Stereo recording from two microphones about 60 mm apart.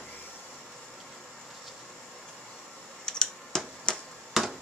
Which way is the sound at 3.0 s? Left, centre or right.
Centre.